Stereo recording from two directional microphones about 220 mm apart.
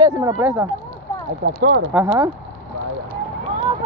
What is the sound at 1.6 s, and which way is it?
Speech, 50° right (ahead or behind).